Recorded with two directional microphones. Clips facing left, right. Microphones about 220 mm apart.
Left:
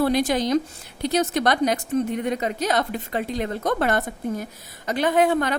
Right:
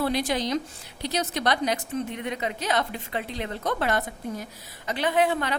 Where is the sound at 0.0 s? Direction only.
45° left (ahead or behind).